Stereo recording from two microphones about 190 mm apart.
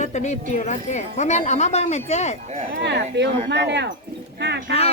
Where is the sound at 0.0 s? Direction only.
40° left (ahead or behind).